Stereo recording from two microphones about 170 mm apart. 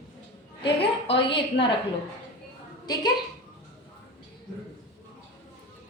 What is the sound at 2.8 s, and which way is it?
Speech, 25° left (ahead or behind).